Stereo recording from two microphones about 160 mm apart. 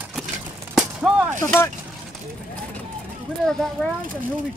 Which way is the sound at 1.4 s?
15° left (ahead or behind).